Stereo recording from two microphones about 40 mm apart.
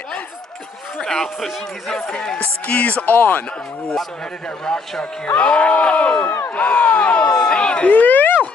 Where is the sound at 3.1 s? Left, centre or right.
Left.